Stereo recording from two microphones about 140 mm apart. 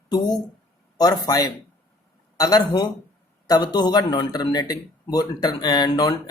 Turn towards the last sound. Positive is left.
turn(degrees=30)  # may be behind; listen again after turning